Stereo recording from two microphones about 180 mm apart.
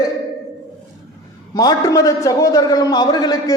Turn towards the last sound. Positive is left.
turn(degrees=20)  # may be behind; listen again after turning